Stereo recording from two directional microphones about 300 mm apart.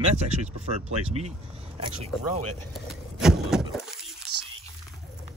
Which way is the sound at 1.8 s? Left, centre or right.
Centre.